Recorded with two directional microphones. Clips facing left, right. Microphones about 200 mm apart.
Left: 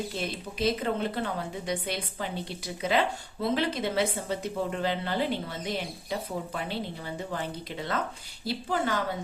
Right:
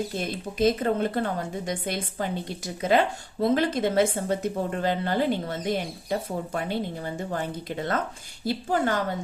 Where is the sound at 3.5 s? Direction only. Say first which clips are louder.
Right 5 dB; 45° right (ahead or behind).